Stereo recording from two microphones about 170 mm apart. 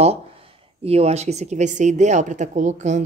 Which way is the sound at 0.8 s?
35° right (ahead or behind).